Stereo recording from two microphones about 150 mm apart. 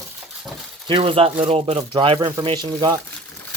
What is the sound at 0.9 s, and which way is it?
Speech, 35° right (ahead or behind).